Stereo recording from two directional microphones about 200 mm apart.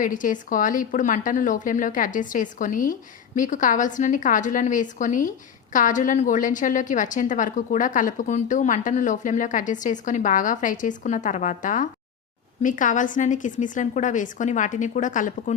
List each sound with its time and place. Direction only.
0.0 s a woman's voice: 40° left (ahead or behind)